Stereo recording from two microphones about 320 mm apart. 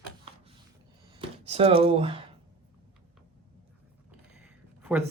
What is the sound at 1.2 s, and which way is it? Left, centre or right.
Speech, centre.